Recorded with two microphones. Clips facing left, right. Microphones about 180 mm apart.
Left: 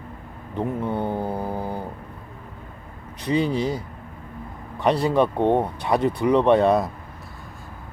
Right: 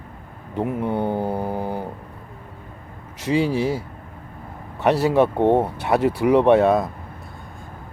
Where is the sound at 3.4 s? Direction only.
70° right (ahead or behind).